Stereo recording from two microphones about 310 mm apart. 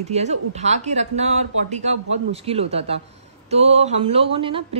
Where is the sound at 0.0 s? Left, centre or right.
Right.